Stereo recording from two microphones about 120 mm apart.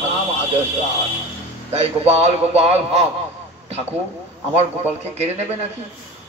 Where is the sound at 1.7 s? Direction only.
60° right (ahead or behind).